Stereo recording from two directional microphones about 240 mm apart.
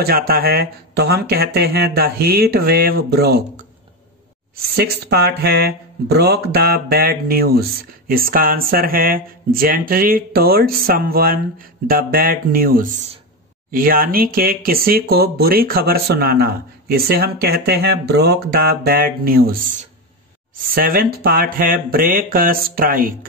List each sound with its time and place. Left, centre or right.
0.0 s speech: right
4.7 s speech: right
20.7 s speech: right